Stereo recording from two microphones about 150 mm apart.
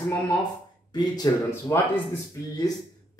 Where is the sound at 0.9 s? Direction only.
25° left (ahead or behind).